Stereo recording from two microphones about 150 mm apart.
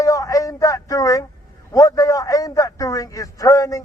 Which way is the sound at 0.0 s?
20° left (ahead or behind).